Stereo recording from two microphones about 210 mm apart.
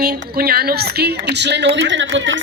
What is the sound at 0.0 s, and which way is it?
A woman's voice, 45° right (ahead or behind).